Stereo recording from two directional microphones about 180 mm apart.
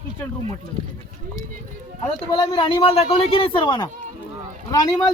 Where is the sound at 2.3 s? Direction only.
25° left (ahead or behind).